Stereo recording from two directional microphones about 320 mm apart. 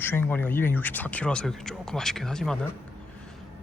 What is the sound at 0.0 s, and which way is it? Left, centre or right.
Speech, centre.